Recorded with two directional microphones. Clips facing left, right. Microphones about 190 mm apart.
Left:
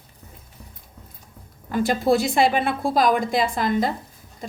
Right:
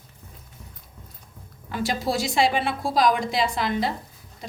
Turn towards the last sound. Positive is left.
turn(degrees=45)  # may be behind; listen again after turning